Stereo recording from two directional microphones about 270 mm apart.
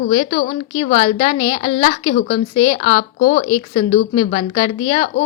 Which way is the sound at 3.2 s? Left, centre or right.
Left.